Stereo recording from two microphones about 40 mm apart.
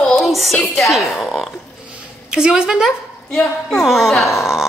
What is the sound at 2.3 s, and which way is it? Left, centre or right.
Speech, centre.